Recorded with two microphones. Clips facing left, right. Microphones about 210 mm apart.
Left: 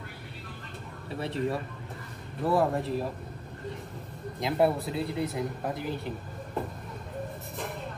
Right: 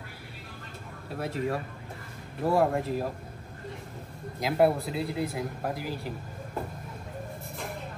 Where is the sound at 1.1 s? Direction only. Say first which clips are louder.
Even; 5° right (ahead or behind).